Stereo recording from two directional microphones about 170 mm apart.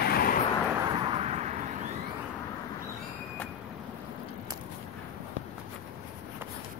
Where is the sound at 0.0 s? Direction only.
60° left (ahead or behind).